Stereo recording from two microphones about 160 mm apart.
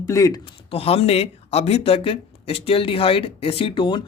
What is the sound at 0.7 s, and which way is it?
Speech, 40° left (ahead or behind).